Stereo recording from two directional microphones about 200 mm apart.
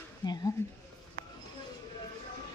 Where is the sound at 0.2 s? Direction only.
20° left (ahead or behind).